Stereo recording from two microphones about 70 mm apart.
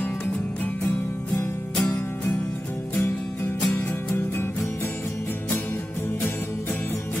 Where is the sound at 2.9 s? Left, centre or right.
Left.